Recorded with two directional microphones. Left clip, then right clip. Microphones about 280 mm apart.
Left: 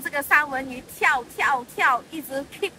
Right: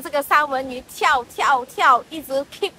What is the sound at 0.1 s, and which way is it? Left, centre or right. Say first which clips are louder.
A woman's voice: right 3 dB; centre.